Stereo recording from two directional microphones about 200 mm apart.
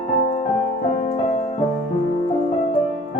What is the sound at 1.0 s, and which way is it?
Music, 35° left (ahead or behind).